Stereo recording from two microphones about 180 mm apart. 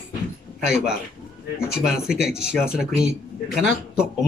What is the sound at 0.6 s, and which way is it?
Speech, 5° right (ahead or behind).